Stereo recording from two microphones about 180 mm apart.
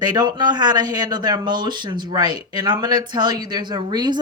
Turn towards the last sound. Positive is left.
turn(degrees=-25)  # may be behind; listen again after turning